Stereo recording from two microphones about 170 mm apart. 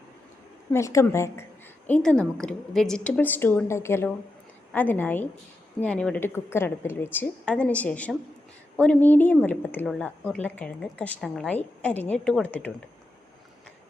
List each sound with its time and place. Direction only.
0.7 s a woman's voice: 15° left (ahead or behind)
1.9 s a woman's voice: 5° left (ahead or behind)